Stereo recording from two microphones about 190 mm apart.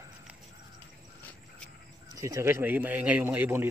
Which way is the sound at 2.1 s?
15° right (ahead or behind).